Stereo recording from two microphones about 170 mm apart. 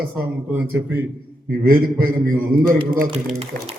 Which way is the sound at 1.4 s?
60° right (ahead or behind).